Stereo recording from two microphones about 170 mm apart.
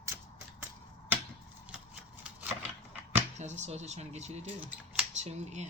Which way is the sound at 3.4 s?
45° right (ahead or behind).